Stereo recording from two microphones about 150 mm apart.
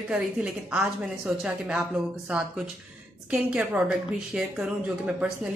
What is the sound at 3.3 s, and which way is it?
A woman's voice, 10° right (ahead or behind).